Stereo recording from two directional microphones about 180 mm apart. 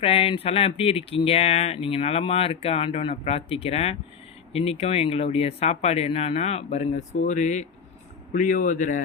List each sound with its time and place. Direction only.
0.0 s speech: 30° left (ahead or behind)